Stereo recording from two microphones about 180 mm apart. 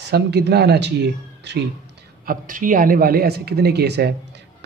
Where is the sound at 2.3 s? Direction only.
50° right (ahead or behind); by 4.1 s 65° right (ahead or behind).